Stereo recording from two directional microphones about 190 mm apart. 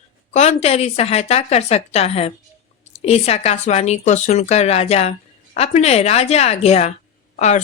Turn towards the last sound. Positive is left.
turn(degrees=40)  # may be behind; listen again after turning